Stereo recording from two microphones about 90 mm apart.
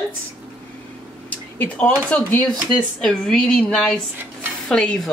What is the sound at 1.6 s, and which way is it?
Speech, 15° left (ahead or behind).